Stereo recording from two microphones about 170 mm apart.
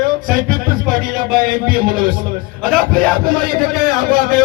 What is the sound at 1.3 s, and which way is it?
Speech, 55° right (ahead or behind).